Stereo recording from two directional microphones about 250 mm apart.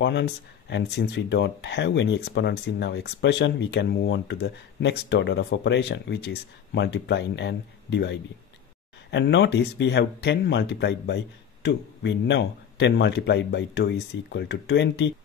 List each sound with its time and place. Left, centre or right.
0.0 s speech: left